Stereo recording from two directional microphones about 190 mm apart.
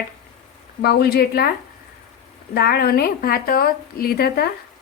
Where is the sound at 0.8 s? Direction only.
55° left (ahead or behind).